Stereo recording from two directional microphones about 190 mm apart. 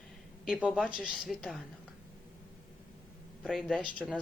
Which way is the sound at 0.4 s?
Centre (ahead or behind).